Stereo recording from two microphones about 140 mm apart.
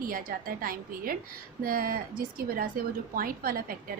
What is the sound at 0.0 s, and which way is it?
A woman's voice, 90° right.